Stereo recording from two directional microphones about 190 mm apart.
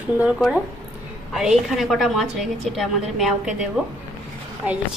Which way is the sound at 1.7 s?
Centre (ahead or behind).